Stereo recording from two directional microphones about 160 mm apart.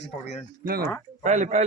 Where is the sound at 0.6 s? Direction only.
70° right (ahead or behind).